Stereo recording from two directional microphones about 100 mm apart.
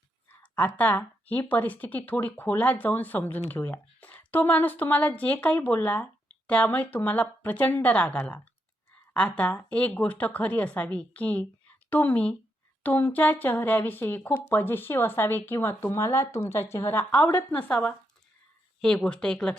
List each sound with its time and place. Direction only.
0.3 s speech: 15° left (ahead or behind)
17.0 s speech: 15° left (ahead or behind)